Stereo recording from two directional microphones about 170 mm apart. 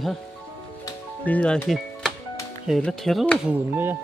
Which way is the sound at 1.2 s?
5° left (ahead or behind).